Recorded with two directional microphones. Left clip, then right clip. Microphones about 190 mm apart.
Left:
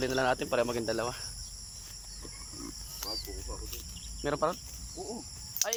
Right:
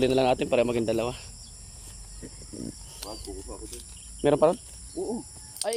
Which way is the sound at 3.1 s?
35° right (ahead or behind).